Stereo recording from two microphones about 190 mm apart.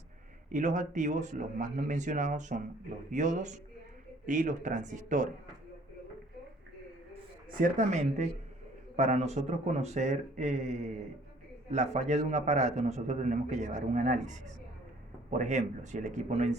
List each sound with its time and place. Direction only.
0.5 s a man's voice: 40° right (ahead or behind)
7.6 s a man's voice: 40° right (ahead or behind)